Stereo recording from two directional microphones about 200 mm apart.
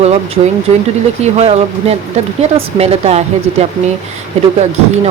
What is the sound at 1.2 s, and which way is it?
Speech, 30° right (ahead or behind).